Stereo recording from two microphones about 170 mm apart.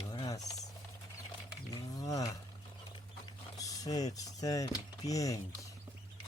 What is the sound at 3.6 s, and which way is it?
Typing, 20° left (ahead or behind).